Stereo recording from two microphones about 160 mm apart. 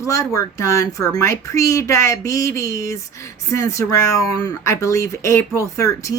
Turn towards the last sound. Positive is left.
turn(degrees=20)  # may be behind; listen again after turning